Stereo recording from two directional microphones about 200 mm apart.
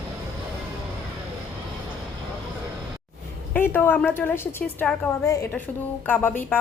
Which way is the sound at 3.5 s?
10° left (ahead or behind).